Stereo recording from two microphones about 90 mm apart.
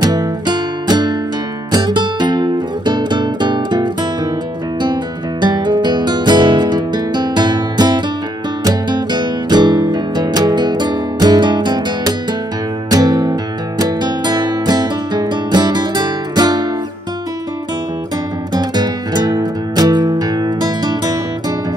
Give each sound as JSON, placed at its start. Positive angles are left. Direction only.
{"t": 0.0, "sound": "music", "side_deg": -50}
{"t": 5.4, "sound": "music", "side_deg": -55}
{"t": 18.5, "sound": "music", "side_deg": -50}